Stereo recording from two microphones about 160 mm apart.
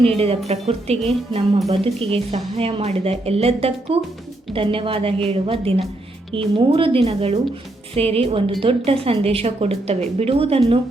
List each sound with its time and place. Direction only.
0.2 s speech: 40° right (ahead or behind)